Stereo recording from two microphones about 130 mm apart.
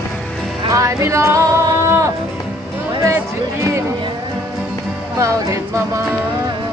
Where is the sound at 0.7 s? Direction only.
25° right (ahead or behind).